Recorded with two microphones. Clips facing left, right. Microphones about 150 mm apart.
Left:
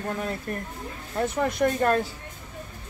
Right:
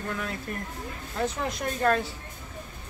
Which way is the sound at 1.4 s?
60° left (ahead or behind).